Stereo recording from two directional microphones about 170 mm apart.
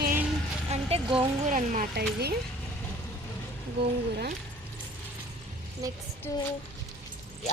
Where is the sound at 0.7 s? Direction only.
35° right (ahead or behind).